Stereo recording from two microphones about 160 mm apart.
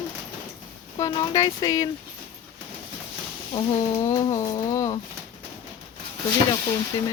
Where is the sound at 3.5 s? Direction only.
20° left (ahead or behind).